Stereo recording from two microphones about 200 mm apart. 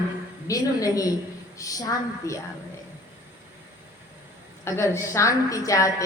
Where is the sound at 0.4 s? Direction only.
15° left (ahead or behind).